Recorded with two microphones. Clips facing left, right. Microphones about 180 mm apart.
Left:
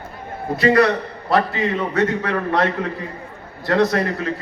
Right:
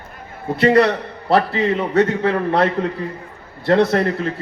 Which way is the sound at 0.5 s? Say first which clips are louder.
Right 1 dB; 30° right (ahead or behind).